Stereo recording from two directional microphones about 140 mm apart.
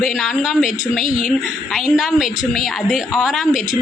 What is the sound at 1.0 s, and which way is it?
Speech, 65° left (ahead or behind).